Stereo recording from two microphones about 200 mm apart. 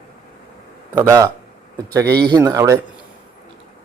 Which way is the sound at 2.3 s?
15° right (ahead or behind).